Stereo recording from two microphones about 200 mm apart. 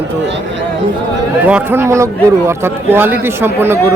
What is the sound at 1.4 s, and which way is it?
Speech, 10° right (ahead or behind).